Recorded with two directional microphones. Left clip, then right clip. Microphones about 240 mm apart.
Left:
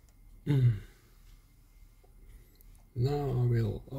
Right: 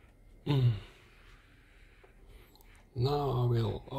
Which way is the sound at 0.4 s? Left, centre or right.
Left.